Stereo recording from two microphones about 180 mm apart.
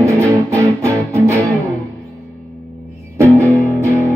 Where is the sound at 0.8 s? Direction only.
15° right (ahead or behind).